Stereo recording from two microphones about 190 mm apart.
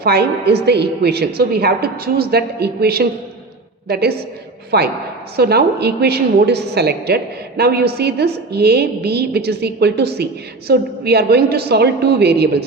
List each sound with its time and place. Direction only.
0.0 s a woman's voice: 55° right (ahead or behind)